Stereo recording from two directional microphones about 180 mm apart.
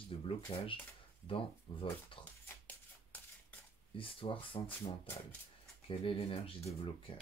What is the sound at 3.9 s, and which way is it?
Speech, 30° left (ahead or behind).